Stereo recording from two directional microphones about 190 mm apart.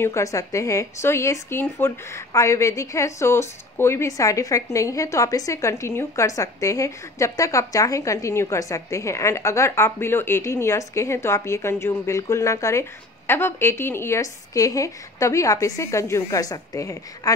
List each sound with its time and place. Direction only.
0.0 s speech: 15° left (ahead or behind)